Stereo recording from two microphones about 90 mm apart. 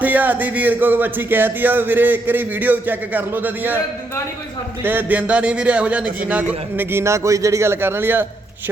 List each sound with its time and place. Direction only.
0.0 s speech: 20° right (ahead or behind)
4.8 s a man's voice: 20° right (ahead or behind)
6.7 s speech: 30° right (ahead or behind)